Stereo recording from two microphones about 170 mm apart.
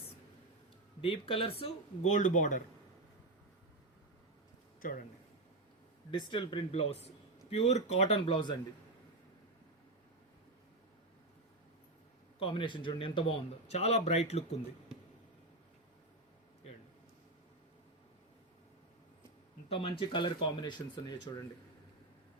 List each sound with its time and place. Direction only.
1.0 s speech: 30° left (ahead or behind)
2.1 s speech: 45° left (ahead or behind)
6.1 s speech: 30° left (ahead or behind)
12.4 s speech: 30° left (ahead or behind)
19.6 s speech: 30° left (ahead or behind)